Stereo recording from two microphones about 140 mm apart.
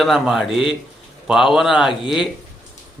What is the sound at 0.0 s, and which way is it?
A man's voice, centre (ahead or behind).